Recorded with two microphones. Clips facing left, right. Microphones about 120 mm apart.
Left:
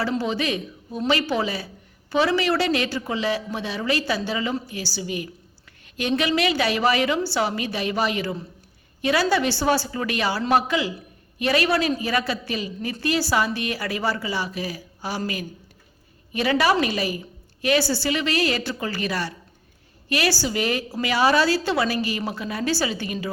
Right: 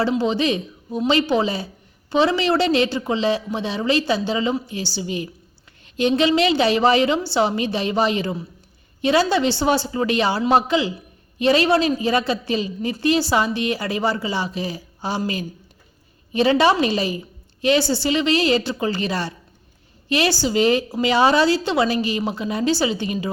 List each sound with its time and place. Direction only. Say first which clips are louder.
0.2 s a woman's voice: right 5 dB; 25° right (ahead or behind)
16.3 s a woman's voice: right 4 dB; 25° right (ahead or behind)